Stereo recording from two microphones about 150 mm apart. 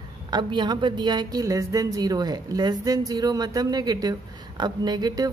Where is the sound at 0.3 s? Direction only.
30° right (ahead or behind).